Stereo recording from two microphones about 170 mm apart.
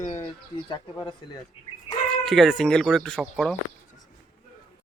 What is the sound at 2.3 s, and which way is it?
Speech, centre (ahead or behind).